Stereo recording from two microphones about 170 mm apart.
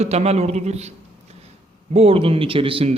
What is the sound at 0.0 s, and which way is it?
A man's voice, 40° right (ahead or behind).